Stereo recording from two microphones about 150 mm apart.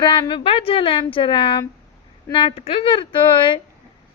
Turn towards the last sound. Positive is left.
turn(degrees=30)  # may be behind; listen again after turning